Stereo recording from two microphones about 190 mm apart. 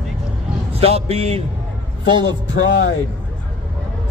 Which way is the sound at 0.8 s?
30° right (ahead or behind).